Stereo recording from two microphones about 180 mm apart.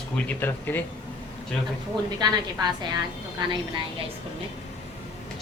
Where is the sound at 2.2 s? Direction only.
25° right (ahead or behind).